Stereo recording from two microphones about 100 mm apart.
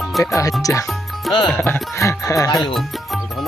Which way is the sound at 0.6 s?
30° left (ahead or behind).